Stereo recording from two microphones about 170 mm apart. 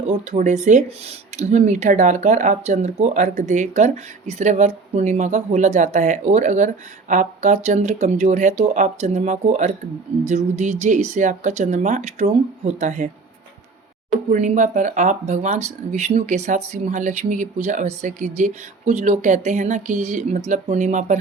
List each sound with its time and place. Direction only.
0.3 s speech: 45° right (ahead or behind)
14.3 s speech: 45° right (ahead or behind)